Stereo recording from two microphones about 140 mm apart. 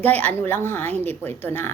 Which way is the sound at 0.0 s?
10° left (ahead or behind).